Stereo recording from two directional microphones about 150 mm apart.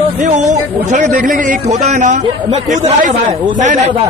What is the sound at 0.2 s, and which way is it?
A man's voice, 55° right (ahead or behind).